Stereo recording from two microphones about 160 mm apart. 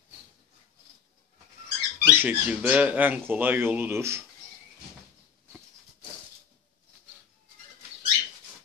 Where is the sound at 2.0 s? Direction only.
10° right (ahead or behind).